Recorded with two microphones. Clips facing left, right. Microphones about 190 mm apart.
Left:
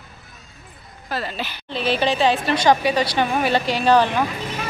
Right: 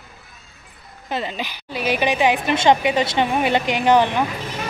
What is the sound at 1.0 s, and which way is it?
A man's voice, 20° right (ahead or behind).